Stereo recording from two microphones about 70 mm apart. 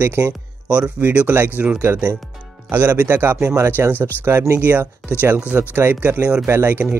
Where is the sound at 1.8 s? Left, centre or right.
Right.